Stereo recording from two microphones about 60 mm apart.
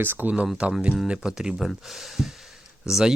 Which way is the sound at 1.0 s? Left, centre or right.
Centre.